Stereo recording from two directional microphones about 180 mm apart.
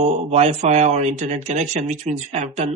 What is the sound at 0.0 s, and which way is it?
Speech, 40° right (ahead or behind).